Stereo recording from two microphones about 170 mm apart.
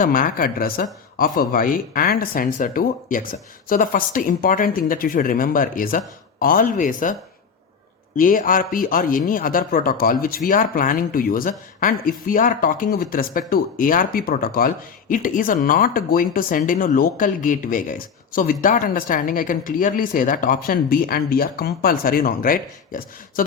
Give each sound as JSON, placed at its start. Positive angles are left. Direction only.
{"t": 0.0, "sound": "speech", "side_deg": 55}